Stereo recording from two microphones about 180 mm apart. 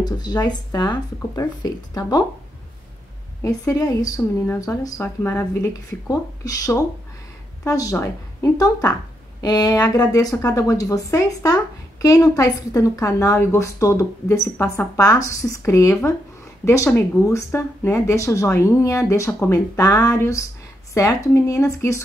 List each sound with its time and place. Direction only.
0.0 s speech: 20° left (ahead or behind)
3.4 s a woman's voice: 20° left (ahead or behind)